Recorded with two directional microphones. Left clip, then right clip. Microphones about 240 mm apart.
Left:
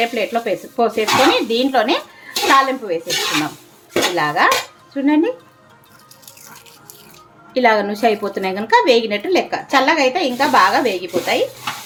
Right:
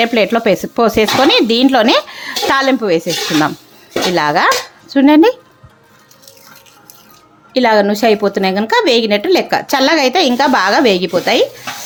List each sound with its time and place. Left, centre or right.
0.0 s speech: right
4.1 s speech: right
7.5 s a woman's voice: right